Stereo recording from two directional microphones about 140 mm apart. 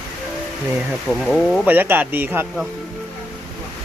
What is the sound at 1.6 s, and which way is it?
Speech, 15° right (ahead or behind).